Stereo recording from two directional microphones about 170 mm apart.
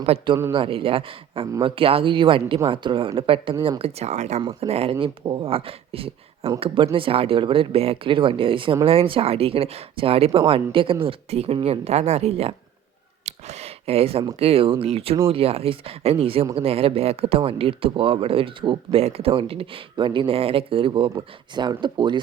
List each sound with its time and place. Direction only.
0.0 s speech: 35° right (ahead or behind)
13.2 s a sound: 40° right (ahead or behind)
14.3 s speech: 35° right (ahead or behind)